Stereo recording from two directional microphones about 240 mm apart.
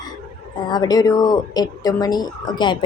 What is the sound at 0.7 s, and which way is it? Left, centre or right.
Speech, centre.